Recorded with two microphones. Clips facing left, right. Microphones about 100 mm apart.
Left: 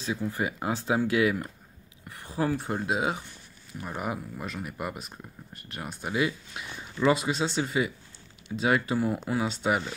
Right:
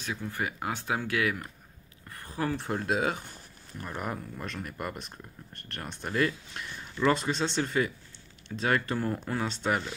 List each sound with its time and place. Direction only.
0.3 s speech: 20° left (ahead or behind)
2.5 s speech: 5° left (ahead or behind)